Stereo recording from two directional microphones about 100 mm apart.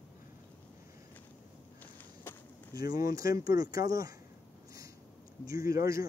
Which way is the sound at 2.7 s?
40° right (ahead or behind).